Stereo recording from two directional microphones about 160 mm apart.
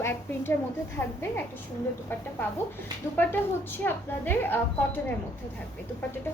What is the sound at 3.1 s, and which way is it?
A woman's voice, 10° left (ahead or behind).